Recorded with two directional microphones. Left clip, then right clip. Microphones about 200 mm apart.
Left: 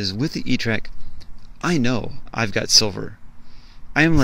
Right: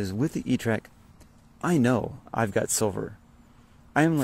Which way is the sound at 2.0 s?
Centre (ahead or behind).